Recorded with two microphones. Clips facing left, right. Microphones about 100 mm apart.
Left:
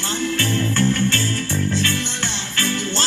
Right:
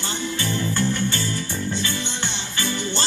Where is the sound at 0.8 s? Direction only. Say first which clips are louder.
Left 5 dB; 15° right (ahead or behind).